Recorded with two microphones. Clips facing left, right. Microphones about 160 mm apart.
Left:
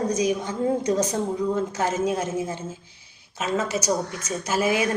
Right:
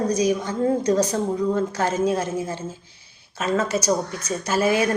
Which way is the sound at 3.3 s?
5° left (ahead or behind).